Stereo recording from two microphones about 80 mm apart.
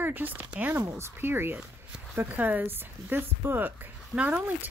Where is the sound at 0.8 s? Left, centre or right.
Right.